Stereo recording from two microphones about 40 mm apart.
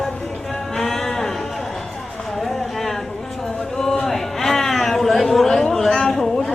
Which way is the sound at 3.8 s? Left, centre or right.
Centre.